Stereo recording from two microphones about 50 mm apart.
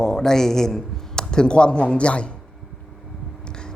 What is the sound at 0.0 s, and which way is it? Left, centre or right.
A man's voice, centre.